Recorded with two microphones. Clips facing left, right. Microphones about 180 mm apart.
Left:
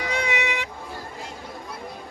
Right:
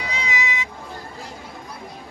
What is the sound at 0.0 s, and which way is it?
Music, 55° left (ahead or behind).